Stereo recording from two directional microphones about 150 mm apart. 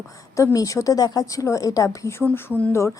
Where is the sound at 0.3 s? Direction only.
20° left (ahead or behind).